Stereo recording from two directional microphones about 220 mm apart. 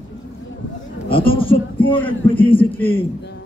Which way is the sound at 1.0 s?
25° left (ahead or behind).